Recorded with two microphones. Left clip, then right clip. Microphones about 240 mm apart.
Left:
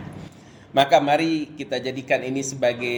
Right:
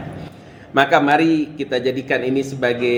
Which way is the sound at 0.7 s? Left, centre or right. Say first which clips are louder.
Right 3 dB; left.